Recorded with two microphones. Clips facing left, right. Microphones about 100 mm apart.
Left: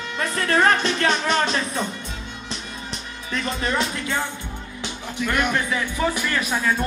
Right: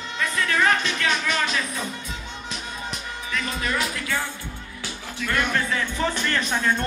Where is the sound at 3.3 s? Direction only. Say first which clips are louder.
Left 3 dB; 30° left (ahead or behind).